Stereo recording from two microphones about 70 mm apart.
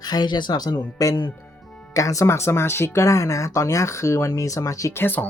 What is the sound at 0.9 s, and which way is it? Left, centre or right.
Speech, left.